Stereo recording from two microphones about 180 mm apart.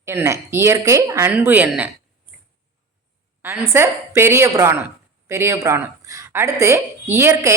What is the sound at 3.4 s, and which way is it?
A woman's voice, 15° right (ahead or behind).